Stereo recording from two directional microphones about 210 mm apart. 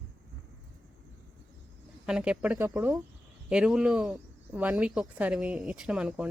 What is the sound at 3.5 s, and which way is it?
Speech, 5° right (ahead or behind).